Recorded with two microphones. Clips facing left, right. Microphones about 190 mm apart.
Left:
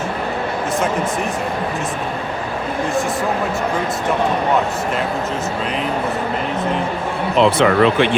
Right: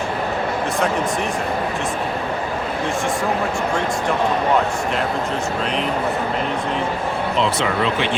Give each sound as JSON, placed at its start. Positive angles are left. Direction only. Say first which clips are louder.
{"t": 7.3, "sound": "speech", "louder": "left 9 dB", "side_deg": 60}